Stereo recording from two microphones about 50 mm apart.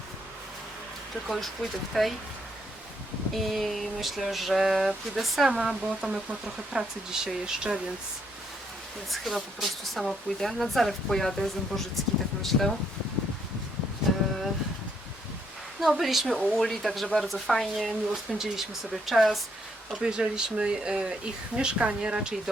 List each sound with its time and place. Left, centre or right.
1.9 s speech: centre
3.3 s speech: centre
9.0 s speech: centre
15.8 s speech: centre
19.9 s speech: centre